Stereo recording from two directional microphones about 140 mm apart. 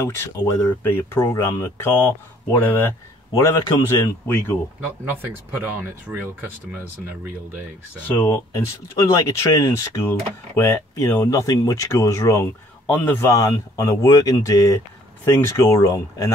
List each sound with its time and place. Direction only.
0.0 s speech: 20° left (ahead or behind)
8.1 s speech: 15° left (ahead or behind)
8.5 s speech: 25° left (ahead or behind)
11.2 s speech: 25° left (ahead or behind)